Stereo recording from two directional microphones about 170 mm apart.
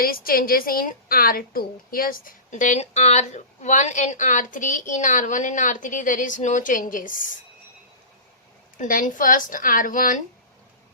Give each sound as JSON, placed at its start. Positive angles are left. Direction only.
{"t": 0.0, "sound": "a woman's voice", "side_deg": 60}
{"t": 8.8, "sound": "a woman's voice", "side_deg": 55}